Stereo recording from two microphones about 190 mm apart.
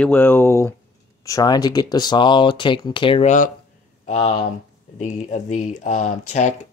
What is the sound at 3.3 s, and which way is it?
Speech, 40° left (ahead or behind).